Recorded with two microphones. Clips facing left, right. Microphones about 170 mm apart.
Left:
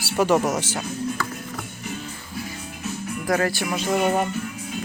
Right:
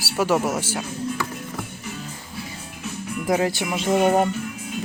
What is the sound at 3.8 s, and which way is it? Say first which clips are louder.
Music: right 4 dB; 30° right (ahead or behind).